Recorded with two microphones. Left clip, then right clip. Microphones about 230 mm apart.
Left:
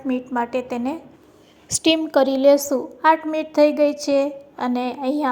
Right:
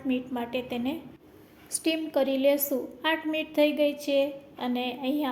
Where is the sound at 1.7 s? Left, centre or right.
Left.